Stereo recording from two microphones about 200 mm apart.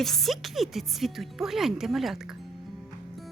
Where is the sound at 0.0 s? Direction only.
Centre (ahead or behind).